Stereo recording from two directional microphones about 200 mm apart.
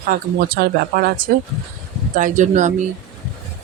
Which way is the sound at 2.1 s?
40° right (ahead or behind).